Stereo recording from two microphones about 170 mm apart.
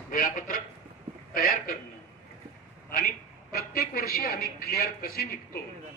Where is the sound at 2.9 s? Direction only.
65° left (ahead or behind).